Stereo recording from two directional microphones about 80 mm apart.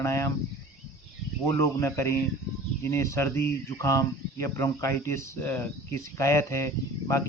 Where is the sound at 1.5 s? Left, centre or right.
Left.